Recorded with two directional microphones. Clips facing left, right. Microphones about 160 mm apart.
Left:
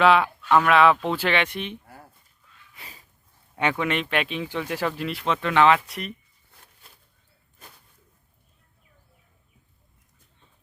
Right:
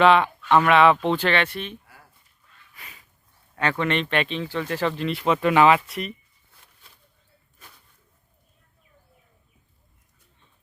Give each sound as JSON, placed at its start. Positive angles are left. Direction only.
{"t": 0.0, "sound": "speech", "side_deg": 5}
{"t": 2.7, "sound": "a sound", "side_deg": 30}
{"t": 3.5, "sound": "speech", "side_deg": 15}
{"t": 5.2, "sound": "speech", "side_deg": -10}